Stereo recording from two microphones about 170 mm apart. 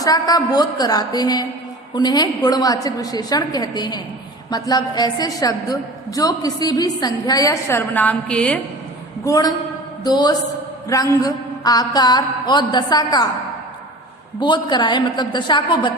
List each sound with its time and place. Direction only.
0.0 s a woman's voice: 20° left (ahead or behind); by 8.5 s 5° left (ahead or behind)
9.2 s a woman's voice: 20° left (ahead or behind)
14.3 s a woman's voice: 25° left (ahead or behind)